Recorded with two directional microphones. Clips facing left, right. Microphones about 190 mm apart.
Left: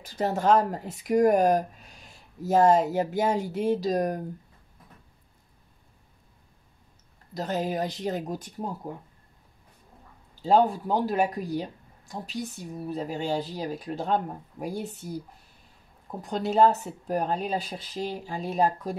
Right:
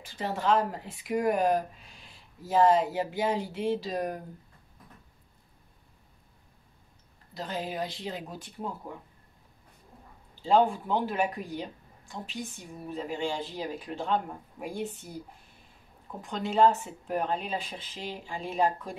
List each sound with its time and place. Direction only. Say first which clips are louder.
0.0 s speech: left 5 dB; 40° left (ahead or behind)
7.3 s speech: left 5 dB; 45° left (ahead or behind)
10.4 s speech: left 2 dB; 40° left (ahead or behind)